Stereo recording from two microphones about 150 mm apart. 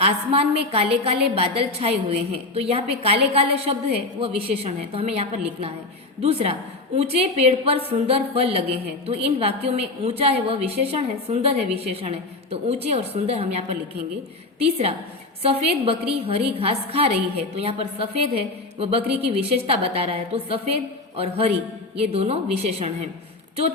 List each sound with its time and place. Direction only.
0.0 s a woman's voice: 40° right (ahead or behind)